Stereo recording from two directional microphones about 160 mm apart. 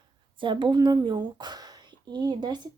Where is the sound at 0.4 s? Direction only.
30° right (ahead or behind).